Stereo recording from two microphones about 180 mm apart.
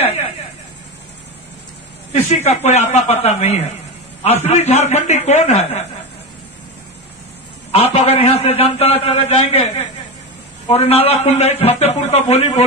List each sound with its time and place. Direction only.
2.1 s a man's voice: 35° left (ahead or behind)
7.7 s a man's voice: 35° left (ahead or behind)